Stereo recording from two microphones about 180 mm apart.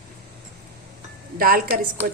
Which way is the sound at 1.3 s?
55° right (ahead or behind).